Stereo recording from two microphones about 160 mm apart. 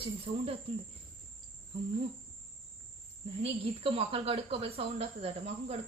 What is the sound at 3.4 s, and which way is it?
Speech, 35° right (ahead or behind).